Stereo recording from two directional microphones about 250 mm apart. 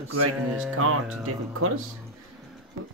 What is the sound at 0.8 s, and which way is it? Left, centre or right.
Speech, right.